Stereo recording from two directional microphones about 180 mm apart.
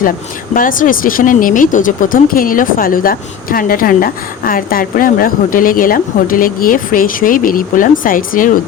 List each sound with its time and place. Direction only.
0.5 s speech: 50° left (ahead or behind)